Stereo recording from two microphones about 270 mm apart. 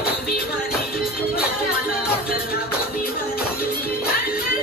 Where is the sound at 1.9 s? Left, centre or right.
Left.